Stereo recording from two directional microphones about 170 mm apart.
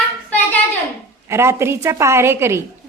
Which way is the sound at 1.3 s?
15° right (ahead or behind).